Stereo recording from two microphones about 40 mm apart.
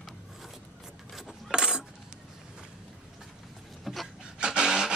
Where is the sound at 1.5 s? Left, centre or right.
Centre.